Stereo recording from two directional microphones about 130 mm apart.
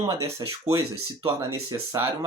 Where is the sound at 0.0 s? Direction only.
25° right (ahead or behind).